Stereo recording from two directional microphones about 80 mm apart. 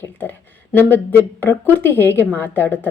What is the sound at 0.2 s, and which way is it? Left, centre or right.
A woman's voice, left.